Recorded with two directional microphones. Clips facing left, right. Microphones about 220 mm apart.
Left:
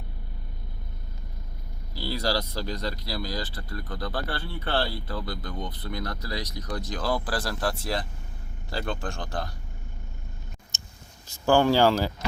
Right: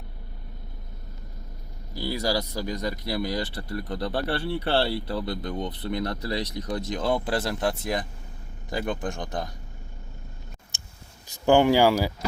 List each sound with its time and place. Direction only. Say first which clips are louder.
1.9 s speech: right 1 dB; 15° right (ahead or behind)
10.7 s a sound: left 2 dB; 15° right (ahead or behind)
11.4 s speech: right 2 dB; 15° right (ahead or behind)